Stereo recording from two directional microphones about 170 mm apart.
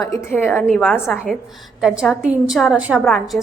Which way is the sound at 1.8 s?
5° right (ahead or behind).